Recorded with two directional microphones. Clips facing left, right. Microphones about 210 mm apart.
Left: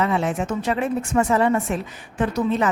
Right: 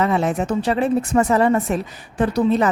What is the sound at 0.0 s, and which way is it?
Speech, 40° right (ahead or behind).